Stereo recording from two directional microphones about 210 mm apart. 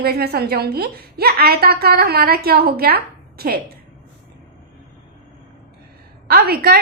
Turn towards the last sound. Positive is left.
turn(degrees=-45)  # may be behind; listen again after turning